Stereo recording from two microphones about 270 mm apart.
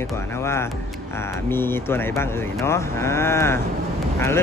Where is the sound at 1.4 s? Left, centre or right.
Centre.